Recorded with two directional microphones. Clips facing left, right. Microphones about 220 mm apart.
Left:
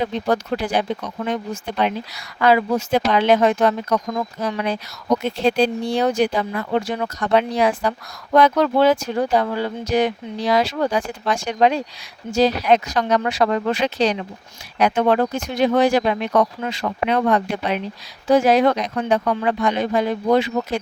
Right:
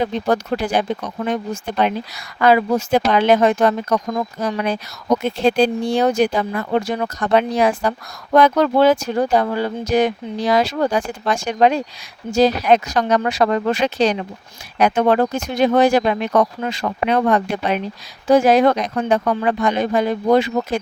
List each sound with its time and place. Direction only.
0.0 s speech: 45° right (ahead or behind)